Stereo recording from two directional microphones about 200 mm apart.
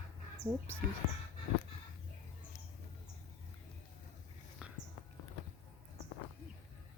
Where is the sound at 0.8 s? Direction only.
55° right (ahead or behind).